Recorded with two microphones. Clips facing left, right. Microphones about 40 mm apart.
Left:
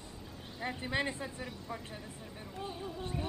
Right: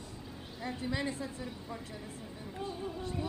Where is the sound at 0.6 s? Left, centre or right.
Left.